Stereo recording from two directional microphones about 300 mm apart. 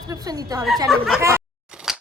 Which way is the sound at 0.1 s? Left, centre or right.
Centre.